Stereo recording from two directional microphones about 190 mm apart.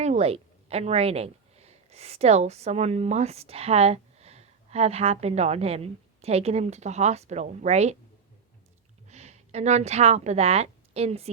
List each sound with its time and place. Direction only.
0.0 s a woman's voice: 35° right (ahead or behind)
9.0 s a woman's voice: 35° right (ahead or behind)